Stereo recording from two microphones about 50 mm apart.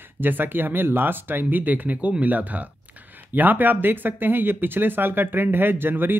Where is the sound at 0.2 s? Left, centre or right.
Right.